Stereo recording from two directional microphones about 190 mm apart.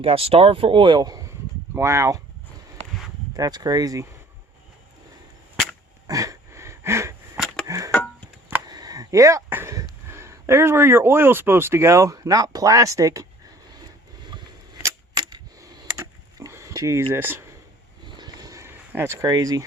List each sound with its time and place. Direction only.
0.0 s speech: 30° right (ahead or behind); by 2.2 s 15° right (ahead or behind)
3.3 s speech: 20° right (ahead or behind)
6.1 s a sound: 20° right (ahead or behind)
7.9 s music: 10° left (ahead or behind)
8.6 s a sound: 20° right (ahead or behind)
10.1 s speech: 15° right (ahead or behind)
13.7 s camera: 20° right (ahead or behind)
17.1 s speech: 10° right (ahead or behind)
18.0 s a sound: 25° right (ahead or behind)